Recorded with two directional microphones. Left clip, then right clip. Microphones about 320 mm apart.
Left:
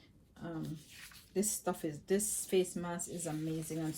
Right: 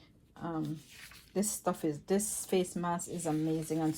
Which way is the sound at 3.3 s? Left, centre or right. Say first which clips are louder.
Right 8 dB; centre.